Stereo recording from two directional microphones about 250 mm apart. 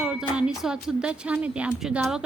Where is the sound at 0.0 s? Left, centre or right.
Centre.